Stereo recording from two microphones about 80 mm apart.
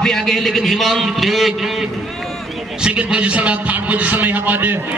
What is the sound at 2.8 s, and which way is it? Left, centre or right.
A man's voice, centre.